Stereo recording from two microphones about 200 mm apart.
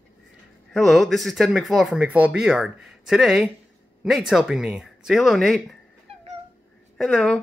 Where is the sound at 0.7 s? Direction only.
Centre (ahead or behind).